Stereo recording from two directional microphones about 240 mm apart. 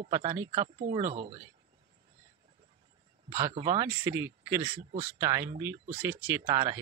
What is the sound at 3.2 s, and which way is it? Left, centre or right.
Speech, centre.